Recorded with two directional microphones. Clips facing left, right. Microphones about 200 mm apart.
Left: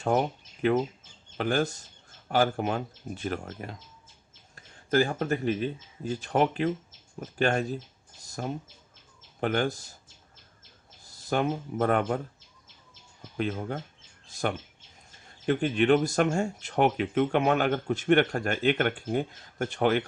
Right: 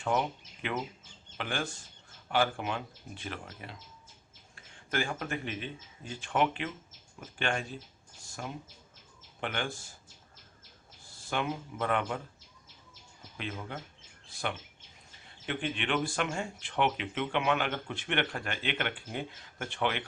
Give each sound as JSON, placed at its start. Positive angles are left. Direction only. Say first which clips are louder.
{"t": 0.0, "sound": "speech", "louder": "left 5 dB", "side_deg": 40}
{"t": 11.0, "sound": "speech", "louder": "left 6 dB", "side_deg": 40}
{"t": 13.3, "sound": "speech", "louder": "left 9 dB", "side_deg": 40}